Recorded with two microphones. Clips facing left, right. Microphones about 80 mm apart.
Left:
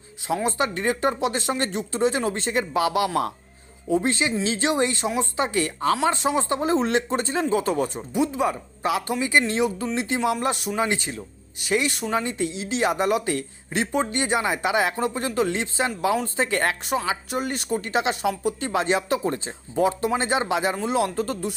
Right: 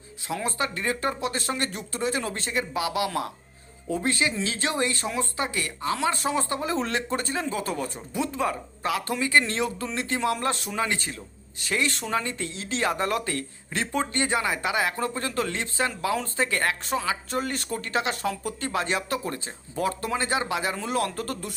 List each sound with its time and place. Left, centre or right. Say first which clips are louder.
0.3 s speech: left 5 dB; left
16.8 s speech: left 2 dB; centre